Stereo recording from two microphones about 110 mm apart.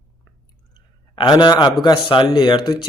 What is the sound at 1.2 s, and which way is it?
Speech, 45° left (ahead or behind).